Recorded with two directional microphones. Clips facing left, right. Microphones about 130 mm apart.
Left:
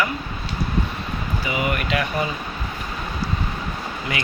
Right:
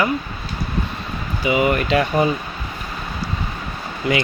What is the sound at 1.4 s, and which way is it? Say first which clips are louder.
Speech: right 8 dB; 25° right (ahead or behind).